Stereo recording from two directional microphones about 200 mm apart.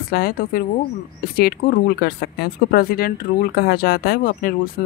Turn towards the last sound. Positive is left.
turn(degrees=45)  # may be behind; listen again after turning